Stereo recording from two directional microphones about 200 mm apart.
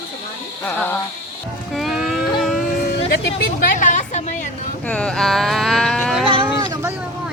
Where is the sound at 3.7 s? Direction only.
40° left (ahead or behind).